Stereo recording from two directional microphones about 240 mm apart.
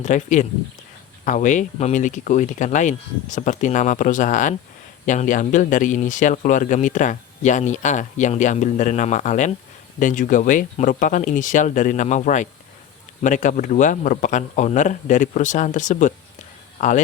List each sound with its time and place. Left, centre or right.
0.0 s speech: left